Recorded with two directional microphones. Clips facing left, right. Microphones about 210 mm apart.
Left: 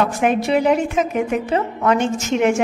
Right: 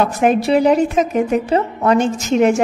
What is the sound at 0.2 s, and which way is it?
A woman's voice, 35° right (ahead or behind).